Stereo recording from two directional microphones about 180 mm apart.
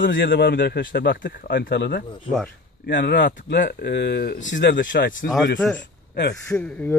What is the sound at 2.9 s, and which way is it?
Speech, 75° left (ahead or behind).